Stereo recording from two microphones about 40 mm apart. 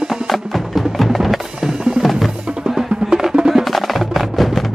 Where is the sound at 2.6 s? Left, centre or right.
Centre.